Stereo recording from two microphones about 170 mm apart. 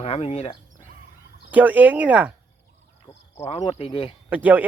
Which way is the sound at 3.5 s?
35° left (ahead or behind).